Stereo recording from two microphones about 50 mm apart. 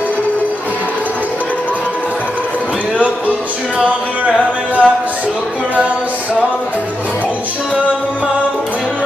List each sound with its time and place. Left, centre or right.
3.8 s music: right